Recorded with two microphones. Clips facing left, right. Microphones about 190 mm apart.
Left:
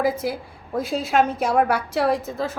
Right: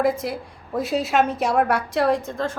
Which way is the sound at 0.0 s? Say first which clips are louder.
Right 1 dB; centre (ahead or behind).